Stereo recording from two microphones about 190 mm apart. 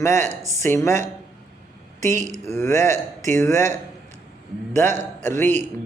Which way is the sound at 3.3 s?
15° left (ahead or behind).